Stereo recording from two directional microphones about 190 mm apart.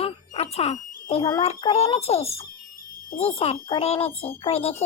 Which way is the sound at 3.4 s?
30° left (ahead or behind).